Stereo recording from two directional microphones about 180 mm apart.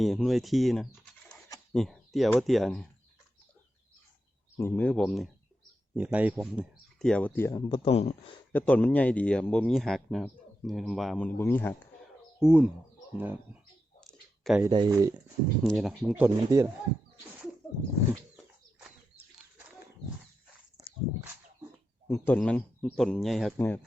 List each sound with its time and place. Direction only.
0.0 s speech: centre (ahead or behind)
0.9 s scratch: centre (ahead or behind)
1.7 s speech: centre (ahead or behind)
4.5 s speech: 10° left (ahead or behind)
6.0 s speech: 10° right (ahead or behind); by 7.8 s 20° left (ahead or behind)
7.9 s speech: 35° left (ahead or behind)
8.5 s speech: 10° left (ahead or behind)
12.4 s speech: 5° right (ahead or behind)
14.0 s a sound: centre (ahead or behind)
14.7 s speech: 25° right (ahead or behind)
15.6 s speech: centre (ahead or behind)
16.2 s speech: 15° right (ahead or behind)
22.1 s speech: 10° left (ahead or behind)